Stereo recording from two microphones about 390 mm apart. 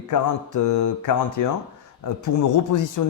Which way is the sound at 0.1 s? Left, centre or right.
Left.